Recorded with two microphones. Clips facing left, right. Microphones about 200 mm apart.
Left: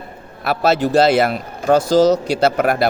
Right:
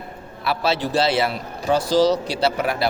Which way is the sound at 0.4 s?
45° left (ahead or behind).